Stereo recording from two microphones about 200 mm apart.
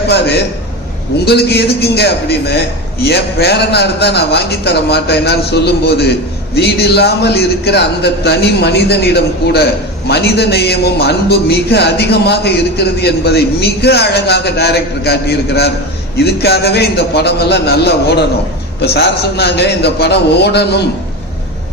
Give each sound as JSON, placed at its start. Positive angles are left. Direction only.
{"t": 1.2, "sound": "a man's voice", "side_deg": 55}